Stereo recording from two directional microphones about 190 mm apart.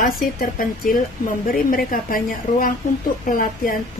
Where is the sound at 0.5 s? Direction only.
45° left (ahead or behind).